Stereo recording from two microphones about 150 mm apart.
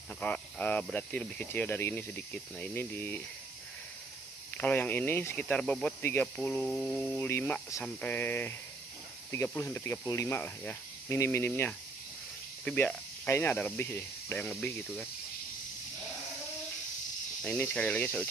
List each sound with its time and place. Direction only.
0.2 s speech: 10° left (ahead or behind)
4.6 s speech: 10° left (ahead or behind)
6.3 s mantra: 5° left (ahead or behind)
7.2 s speech: 15° left (ahead or behind)
14.5 s mantra: centre (ahead or behind)
17.4 s speech: 10° left (ahead or behind)